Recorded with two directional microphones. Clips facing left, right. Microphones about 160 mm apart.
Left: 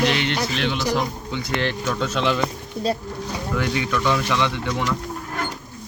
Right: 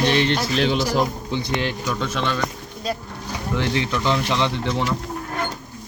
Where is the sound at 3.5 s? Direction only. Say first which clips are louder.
Right 1 dB; 25° right (ahead or behind).